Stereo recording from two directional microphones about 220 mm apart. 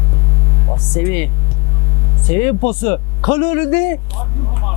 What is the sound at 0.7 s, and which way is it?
Speech, 20° left (ahead or behind).